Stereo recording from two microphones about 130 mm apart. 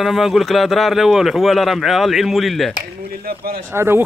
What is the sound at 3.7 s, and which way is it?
Speech, 15° right (ahead or behind).